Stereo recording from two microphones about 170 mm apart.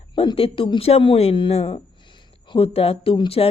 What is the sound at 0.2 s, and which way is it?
Speech, 35° left (ahead or behind).